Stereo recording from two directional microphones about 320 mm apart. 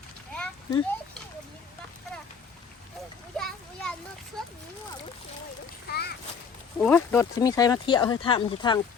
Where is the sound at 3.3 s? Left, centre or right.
Centre.